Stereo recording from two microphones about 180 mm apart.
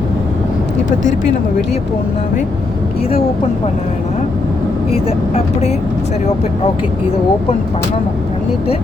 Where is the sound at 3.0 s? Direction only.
35° left (ahead or behind).